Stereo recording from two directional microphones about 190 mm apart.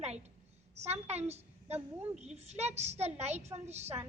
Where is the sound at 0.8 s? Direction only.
35° right (ahead or behind).